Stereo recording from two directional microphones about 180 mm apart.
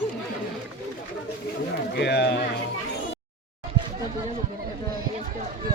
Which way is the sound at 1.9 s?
65° left (ahead or behind).